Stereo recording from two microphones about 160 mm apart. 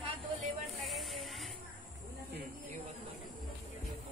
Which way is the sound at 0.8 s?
Centre (ahead or behind).